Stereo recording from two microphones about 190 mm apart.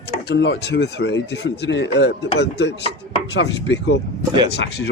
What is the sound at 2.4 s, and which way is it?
Chopping, 65° left (ahead or behind).